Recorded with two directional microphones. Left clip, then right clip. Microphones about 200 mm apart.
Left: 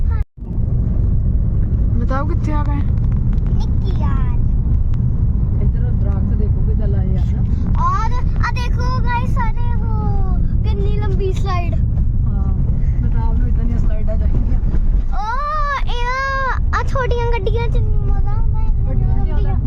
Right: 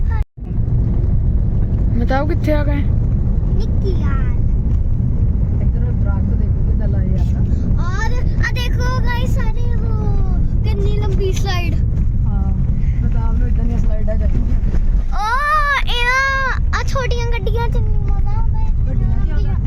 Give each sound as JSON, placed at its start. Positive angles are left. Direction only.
{"t": 2.0, "sound": "speech", "side_deg": 5}
{"t": 10.8, "sound": "speech", "side_deg": 50}
{"t": 15.2, "sound": "baby cry", "side_deg": 5}